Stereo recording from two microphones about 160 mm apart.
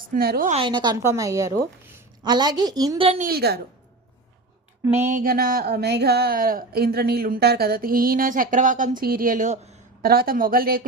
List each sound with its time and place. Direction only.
0.1 s speech: 65° right (ahead or behind)
0.5 s a woman's voice: 30° right (ahead or behind)
3.2 s a woman's voice: 75° right (ahead or behind)
5.0 s speech: 60° right (ahead or behind)
10.0 s speech: 70° right (ahead or behind)